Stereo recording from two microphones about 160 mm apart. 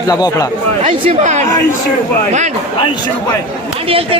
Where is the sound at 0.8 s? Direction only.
45° right (ahead or behind).